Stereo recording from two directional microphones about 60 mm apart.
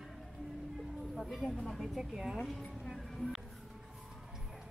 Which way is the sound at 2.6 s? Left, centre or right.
Centre.